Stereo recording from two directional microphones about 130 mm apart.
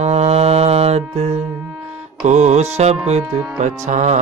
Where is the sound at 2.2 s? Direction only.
65° right (ahead or behind).